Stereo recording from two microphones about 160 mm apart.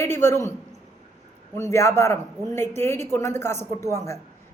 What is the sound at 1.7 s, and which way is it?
A woman's voice, 15° left (ahead or behind).